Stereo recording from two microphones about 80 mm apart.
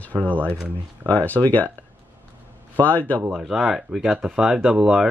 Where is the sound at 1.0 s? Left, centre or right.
Centre.